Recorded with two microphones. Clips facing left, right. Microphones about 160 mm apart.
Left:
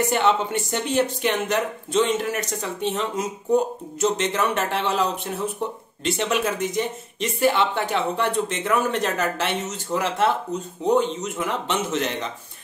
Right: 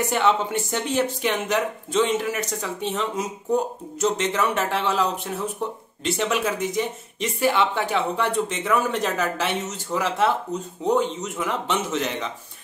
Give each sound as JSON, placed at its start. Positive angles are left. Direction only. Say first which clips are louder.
{"t": 0.1, "sound": "speech", "louder": "even", "side_deg": -5}
{"t": 6.0, "sound": "speech", "louder": "even", "side_deg": -5}